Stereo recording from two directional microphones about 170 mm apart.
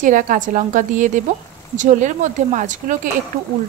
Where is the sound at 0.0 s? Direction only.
50° right (ahead or behind).